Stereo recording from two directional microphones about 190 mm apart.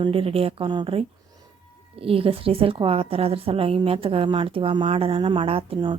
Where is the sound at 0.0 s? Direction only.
30° right (ahead or behind).